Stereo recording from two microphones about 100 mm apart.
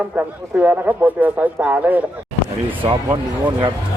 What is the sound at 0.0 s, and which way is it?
A man's voice, 15° right (ahead or behind).